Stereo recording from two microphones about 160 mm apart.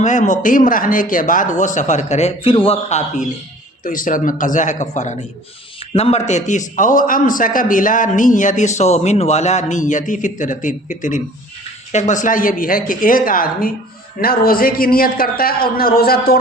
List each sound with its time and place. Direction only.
0.0 s a man's voice: 50° left (ahead or behind)
3.8 s a man's voice: 55° left (ahead or behind); by 16.4 s 70° left (ahead or behind)